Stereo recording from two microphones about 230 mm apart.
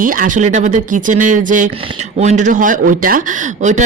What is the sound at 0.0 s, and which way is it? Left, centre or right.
Speech, right.